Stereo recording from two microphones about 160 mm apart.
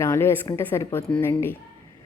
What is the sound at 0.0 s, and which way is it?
A woman's voice, 15° left (ahead or behind).